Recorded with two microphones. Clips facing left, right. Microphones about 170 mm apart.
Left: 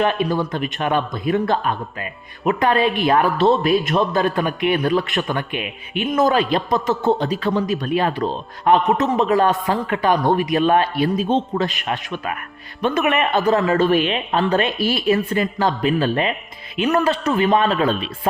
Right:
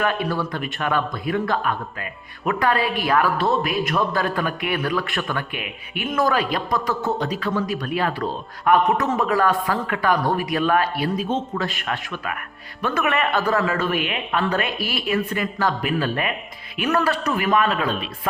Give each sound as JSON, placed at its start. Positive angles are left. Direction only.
{"t": 0.0, "sound": "speech", "side_deg": 20}